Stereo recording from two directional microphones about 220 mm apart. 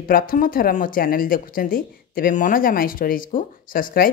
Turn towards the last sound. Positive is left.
turn(degrees=40)  # may be behind; listen again after turning